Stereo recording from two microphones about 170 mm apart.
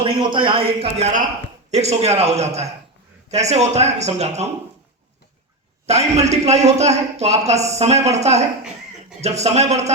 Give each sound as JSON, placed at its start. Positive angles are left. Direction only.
{"t": 0.0, "sound": "a man's voice", "side_deg": -30}
{"t": 5.8, "sound": "a man's voice", "side_deg": -40}